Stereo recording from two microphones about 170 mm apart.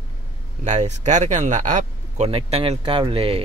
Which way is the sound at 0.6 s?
45° right (ahead or behind).